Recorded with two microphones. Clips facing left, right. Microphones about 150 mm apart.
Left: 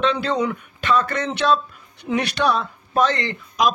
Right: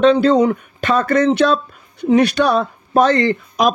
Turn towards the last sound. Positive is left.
turn(degrees=-45)  # may be behind; listen again after turning